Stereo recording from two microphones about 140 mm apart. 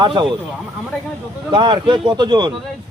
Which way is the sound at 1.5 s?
35° right (ahead or behind).